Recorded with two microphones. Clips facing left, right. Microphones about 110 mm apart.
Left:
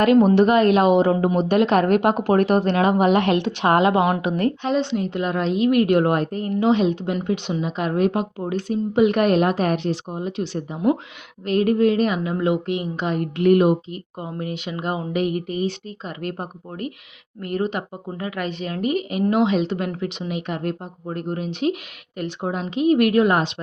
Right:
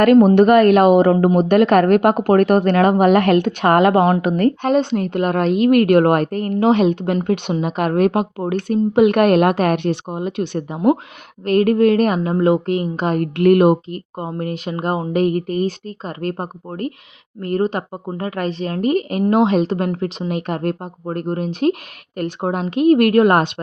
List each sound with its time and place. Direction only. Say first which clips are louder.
0.0 s a woman's voice: right 4 dB; 50° right (ahead or behind)